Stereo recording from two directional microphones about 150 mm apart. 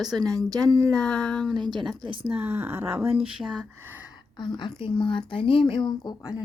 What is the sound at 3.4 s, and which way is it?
Speech, centre (ahead or behind).